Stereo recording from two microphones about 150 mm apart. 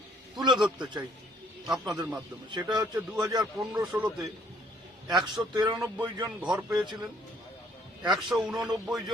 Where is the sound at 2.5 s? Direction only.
30° right (ahead or behind).